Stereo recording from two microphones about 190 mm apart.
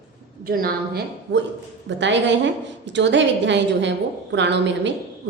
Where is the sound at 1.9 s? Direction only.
70° right (ahead or behind).